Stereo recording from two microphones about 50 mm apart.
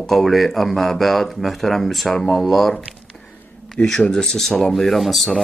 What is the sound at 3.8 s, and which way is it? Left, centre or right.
Speech, centre.